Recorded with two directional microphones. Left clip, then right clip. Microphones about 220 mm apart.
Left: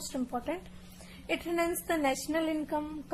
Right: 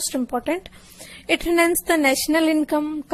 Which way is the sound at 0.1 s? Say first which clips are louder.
Right 10 dB; 40° right (ahead or behind).